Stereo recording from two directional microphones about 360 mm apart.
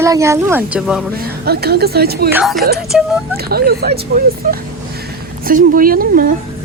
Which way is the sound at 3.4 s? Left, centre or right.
Right.